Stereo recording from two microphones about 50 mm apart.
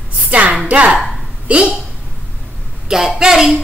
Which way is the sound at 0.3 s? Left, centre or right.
Right.